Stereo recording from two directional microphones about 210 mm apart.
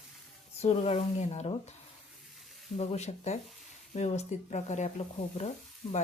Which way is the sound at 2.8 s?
30° left (ahead or behind).